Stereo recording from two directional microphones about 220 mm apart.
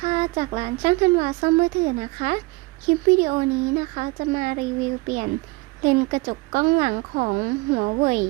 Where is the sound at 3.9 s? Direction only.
35° right (ahead or behind).